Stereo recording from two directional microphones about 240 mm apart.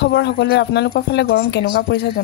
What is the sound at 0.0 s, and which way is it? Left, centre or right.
A woman's voice, left.